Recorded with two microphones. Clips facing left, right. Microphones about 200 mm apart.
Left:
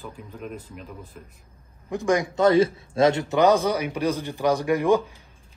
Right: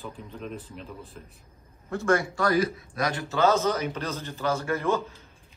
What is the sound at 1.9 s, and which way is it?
A man's voice, 15° left (ahead or behind).